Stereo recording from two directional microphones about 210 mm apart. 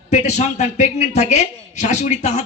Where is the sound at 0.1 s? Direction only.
30° left (ahead or behind).